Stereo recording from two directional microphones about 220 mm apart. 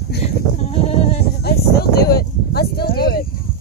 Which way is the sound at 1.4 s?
45° left (ahead or behind).